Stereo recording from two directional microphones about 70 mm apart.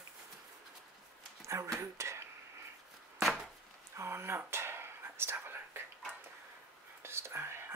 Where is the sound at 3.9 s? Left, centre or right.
Right.